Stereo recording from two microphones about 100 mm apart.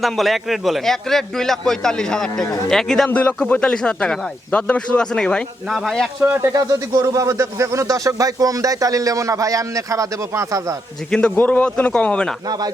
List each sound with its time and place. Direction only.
0.0 s a man's voice: centre (ahead or behind)
6.2 s speech: 20° right (ahead or behind)
6.5 s speech: 35° right (ahead or behind)
11.3 s speech: 15° left (ahead or behind)
12.5 s speech: 40° right (ahead or behind)